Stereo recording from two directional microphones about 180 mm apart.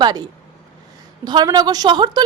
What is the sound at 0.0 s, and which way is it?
A woman's voice, 20° right (ahead or behind).